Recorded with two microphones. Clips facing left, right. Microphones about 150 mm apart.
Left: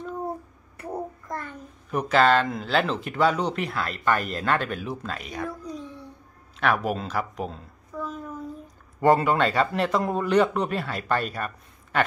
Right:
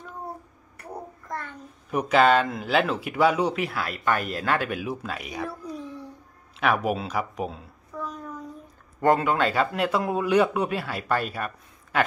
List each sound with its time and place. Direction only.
1.9 s a woman's voice: 10° right (ahead or behind)